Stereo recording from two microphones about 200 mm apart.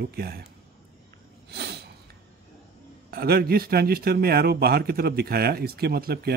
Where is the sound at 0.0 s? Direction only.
50° right (ahead or behind).